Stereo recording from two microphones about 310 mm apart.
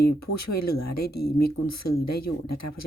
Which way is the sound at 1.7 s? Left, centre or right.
Left.